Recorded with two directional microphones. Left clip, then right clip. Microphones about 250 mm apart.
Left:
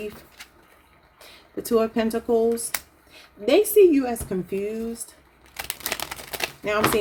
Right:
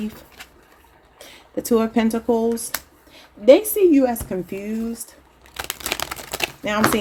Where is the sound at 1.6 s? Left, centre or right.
Right.